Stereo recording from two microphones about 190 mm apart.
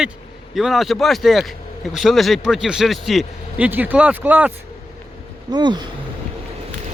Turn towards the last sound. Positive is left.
turn(degrees=-25)  # may be behind; listen again after turning